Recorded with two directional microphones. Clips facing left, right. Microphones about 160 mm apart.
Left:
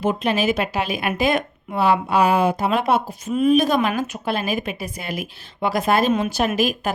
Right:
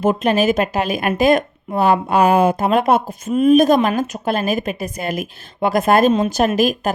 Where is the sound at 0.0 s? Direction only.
45° right (ahead or behind).